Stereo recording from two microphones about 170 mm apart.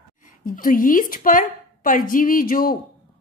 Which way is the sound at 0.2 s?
55° left (ahead or behind).